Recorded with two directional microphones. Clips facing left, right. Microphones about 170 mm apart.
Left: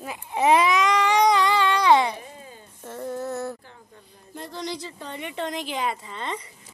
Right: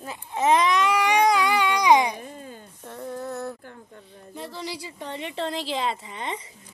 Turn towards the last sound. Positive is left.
turn(degrees=-20)  # may be behind; listen again after turning